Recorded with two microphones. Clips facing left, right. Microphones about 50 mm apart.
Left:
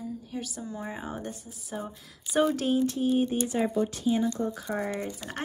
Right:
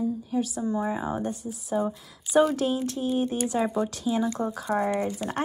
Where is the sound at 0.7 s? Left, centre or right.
Centre.